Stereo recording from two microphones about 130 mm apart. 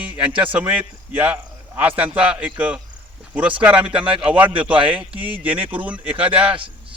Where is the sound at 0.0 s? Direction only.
10° right (ahead or behind).